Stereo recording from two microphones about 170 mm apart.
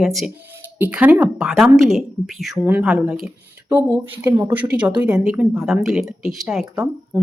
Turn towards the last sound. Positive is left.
turn(degrees=-15)  # may be behind; listen again after turning